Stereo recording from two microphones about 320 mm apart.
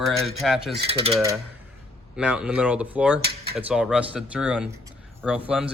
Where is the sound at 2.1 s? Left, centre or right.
Centre.